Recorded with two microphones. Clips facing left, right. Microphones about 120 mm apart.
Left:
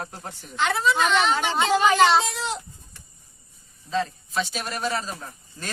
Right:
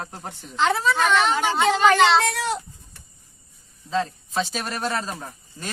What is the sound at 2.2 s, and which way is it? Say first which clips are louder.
Speech: right 5 dB; 60° right (ahead or behind).